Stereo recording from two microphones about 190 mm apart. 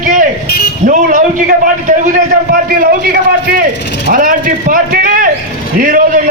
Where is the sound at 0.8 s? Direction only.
45° right (ahead or behind).